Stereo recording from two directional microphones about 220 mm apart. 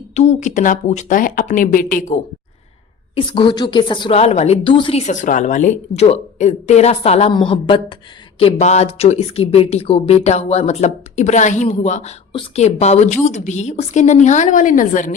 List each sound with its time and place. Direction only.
0.1 s speech: 30° left (ahead or behind)
3.2 s a woman's voice: 20° left (ahead or behind); by 15.1 s 35° left (ahead or behind)